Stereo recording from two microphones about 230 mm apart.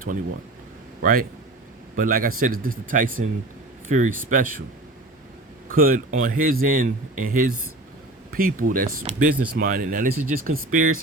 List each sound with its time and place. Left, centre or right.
1.0 s speech: right
5.6 s speech: right